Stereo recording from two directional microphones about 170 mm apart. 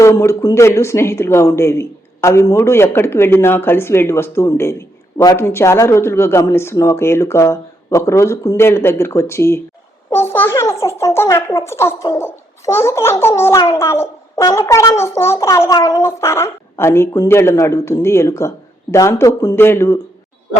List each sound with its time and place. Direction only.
0.0 s a child's voice: 20° left (ahead or behind)